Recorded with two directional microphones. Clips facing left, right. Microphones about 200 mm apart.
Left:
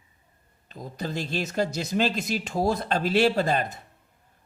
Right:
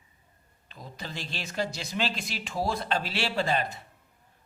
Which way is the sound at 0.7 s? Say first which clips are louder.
Left 8 dB; 45° left (ahead or behind).